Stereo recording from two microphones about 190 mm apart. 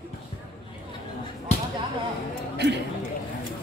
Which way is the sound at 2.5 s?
65° right (ahead or behind).